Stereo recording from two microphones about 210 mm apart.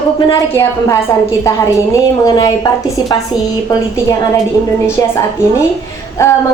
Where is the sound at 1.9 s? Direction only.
15° left (ahead or behind).